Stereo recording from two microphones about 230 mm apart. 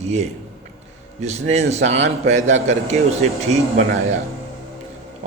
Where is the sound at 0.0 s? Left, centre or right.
Right.